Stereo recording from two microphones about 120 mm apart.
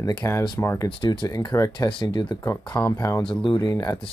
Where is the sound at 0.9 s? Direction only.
40° left (ahead or behind).